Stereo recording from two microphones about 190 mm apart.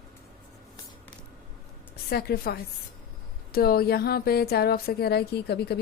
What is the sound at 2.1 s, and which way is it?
A woman's voice, 55° left (ahead or behind).